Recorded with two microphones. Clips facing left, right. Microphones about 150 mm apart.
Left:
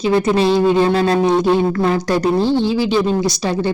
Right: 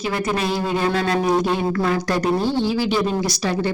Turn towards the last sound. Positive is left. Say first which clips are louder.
# left 4 dB
turn(degrees=20)  # may be behind; listen again after turning